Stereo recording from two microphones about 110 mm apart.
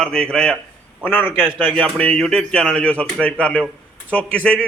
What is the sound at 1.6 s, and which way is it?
A man's voice, 15° left (ahead or behind).